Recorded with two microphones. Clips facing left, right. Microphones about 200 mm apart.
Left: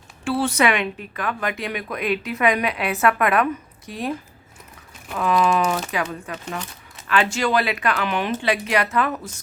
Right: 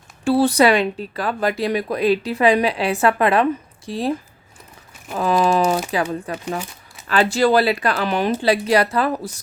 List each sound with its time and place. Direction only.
0.3 s speech: 35° right (ahead or behind)
5.1 s speech: 30° right (ahead or behind)